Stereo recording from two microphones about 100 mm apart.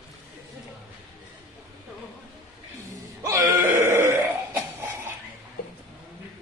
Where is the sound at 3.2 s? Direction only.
30° right (ahead or behind).